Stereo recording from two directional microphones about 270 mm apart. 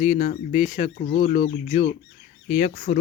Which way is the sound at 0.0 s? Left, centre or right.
Left.